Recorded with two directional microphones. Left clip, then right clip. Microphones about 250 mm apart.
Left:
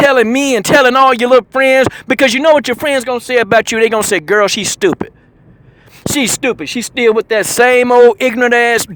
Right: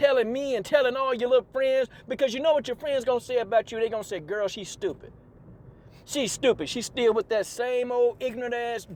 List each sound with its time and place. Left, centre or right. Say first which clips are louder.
0.2 s speech: left 14 dB; left
6.1 s speech: left 10 dB; left